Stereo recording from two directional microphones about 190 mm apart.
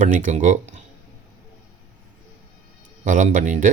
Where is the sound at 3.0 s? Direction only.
40° right (ahead or behind).